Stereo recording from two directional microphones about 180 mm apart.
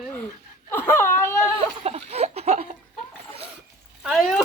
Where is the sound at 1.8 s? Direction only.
35° right (ahead or behind).